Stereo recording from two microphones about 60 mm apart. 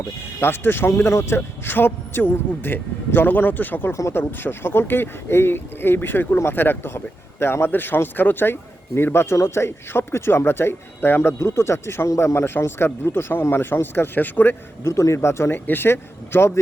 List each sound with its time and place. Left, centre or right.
0.3 s speech: left
0.9 s speech: left
1.4 s speech: left
9.3 s speech: left
14.8 s speech: left
15.5 s speech: left